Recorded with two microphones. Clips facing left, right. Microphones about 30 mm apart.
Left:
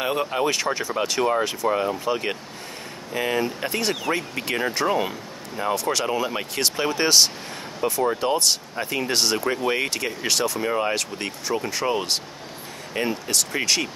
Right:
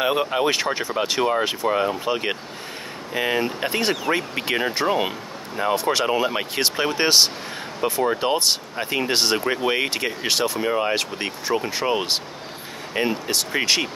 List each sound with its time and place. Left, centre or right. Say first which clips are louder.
0.0 s speech: right 3 dB; centre